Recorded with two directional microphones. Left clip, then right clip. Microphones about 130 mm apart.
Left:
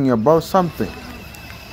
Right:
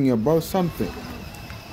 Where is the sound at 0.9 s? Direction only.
65° right (ahead or behind).